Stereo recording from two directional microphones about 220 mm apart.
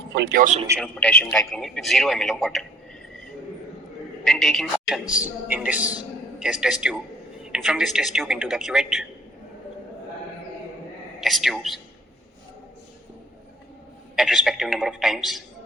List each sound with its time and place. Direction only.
0.2 s a man's voice: 45° right (ahead or behind)
0.8 s a man's voice: 5° left (ahead or behind)
4.2 s a man's voice: centre (ahead or behind)
11.2 s a man's voice: centre (ahead or behind)
14.2 s a man's voice: centre (ahead or behind)